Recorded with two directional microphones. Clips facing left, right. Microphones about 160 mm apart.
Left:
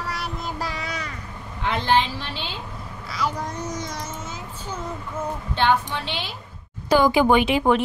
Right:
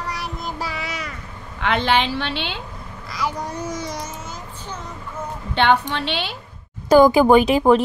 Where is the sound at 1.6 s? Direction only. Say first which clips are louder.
Right 2 dB; 80° right.